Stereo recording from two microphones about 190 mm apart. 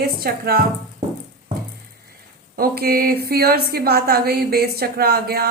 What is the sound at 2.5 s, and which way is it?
A woman's voice, 50° right (ahead or behind).